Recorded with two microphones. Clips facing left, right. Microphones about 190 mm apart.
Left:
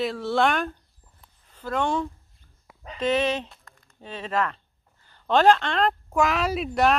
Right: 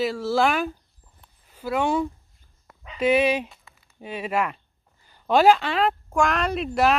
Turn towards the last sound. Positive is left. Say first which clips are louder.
# right 1 dB
turn(degrees=0)  # may be behind; listen again after turning